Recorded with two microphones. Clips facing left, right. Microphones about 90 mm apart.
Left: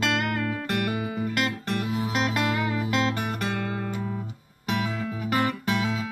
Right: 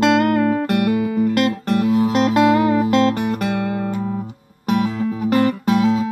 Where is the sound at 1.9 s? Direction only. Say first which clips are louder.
Right 11 dB; 40° right (ahead or behind).